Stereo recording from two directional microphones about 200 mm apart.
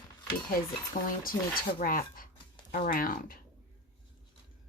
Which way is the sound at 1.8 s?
45° left (ahead or behind).